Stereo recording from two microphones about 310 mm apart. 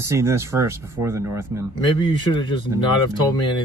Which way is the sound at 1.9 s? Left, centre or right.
Centre.